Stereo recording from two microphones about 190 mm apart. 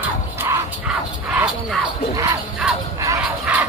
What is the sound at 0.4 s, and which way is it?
Music, 15° right (ahead or behind).